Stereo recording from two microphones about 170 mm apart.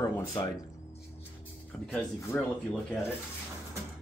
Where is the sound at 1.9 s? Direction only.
15° left (ahead or behind).